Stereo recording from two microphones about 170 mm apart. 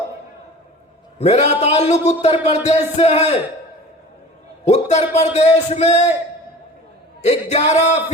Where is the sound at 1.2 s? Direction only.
40° left (ahead or behind).